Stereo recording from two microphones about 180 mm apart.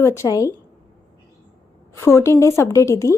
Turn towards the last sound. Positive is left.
turn(degrees=15)  # may be behind; listen again after turning